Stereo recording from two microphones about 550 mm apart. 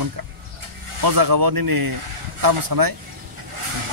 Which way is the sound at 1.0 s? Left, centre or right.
Right.